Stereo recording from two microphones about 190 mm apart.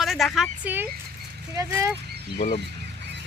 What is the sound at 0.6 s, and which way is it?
Speech, 10° right (ahead or behind).